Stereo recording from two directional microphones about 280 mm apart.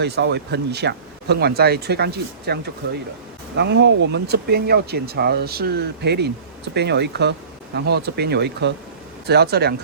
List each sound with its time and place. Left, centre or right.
0.0 s speech: right